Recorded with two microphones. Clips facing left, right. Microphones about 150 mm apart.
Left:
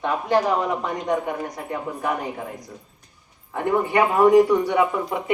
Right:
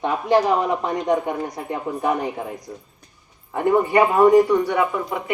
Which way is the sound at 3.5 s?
Centre (ahead or behind).